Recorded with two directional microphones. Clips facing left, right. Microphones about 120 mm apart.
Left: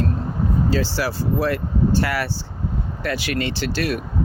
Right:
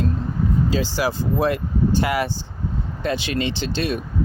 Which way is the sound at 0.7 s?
15° right (ahead or behind).